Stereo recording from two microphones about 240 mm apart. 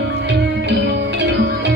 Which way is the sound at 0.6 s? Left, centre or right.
Right.